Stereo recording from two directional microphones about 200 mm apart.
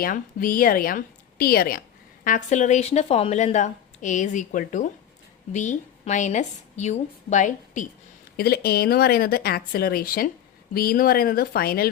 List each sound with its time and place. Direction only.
0.0 s a woman's voice: 45° left (ahead or behind)
8.4 s speech: 50° left (ahead or behind)